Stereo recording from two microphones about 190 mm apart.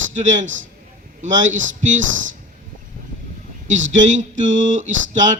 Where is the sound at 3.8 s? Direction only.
80° right.